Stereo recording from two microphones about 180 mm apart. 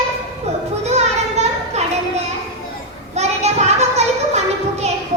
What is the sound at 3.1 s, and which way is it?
Child singing, 40° right (ahead or behind).